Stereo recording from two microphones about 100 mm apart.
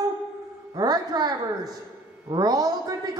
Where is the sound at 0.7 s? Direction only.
40° right (ahead or behind).